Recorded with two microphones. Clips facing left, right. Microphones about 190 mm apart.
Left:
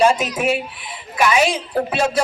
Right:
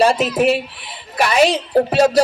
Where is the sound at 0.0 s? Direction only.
35° right (ahead or behind).